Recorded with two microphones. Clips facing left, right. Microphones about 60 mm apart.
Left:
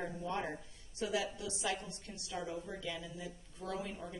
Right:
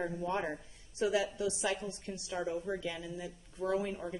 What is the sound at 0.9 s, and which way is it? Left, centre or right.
A woman's voice, right.